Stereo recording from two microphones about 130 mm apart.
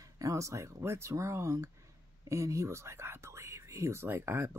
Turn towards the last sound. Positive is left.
turn(degrees=-15)  # may be behind; listen again after turning